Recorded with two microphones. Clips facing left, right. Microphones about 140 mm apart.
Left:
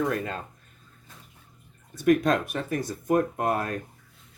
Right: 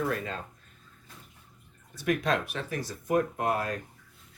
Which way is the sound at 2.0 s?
45° left (ahead or behind).